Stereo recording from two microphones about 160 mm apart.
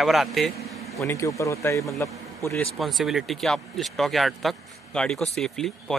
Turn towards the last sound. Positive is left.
turn(degrees=5)  # may be behind; listen again after turning